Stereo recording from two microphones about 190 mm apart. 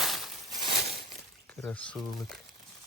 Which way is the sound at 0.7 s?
55° right (ahead or behind).